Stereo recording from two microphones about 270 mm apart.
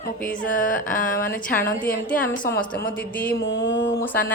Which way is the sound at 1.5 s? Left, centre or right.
Centre.